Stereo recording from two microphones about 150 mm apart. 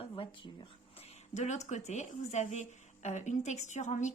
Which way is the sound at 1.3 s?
50° left (ahead or behind).